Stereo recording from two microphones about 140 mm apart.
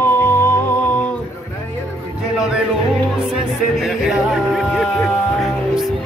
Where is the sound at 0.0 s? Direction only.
15° left (ahead or behind).